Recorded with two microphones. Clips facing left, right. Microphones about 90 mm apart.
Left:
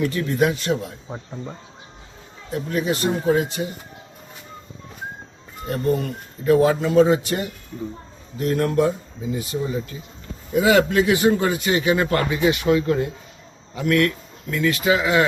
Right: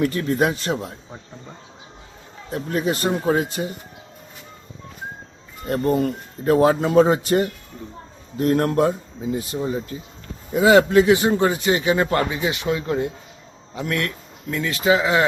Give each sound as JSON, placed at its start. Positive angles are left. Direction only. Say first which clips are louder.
{"t": 0.1, "sound": "speech", "louder": "even", "side_deg": -40}
{"t": 2.5, "sound": "speech", "louder": "even", "side_deg": -40}
{"t": 5.6, "sound": "a man's voice", "louder": "right 2 dB", "side_deg": -45}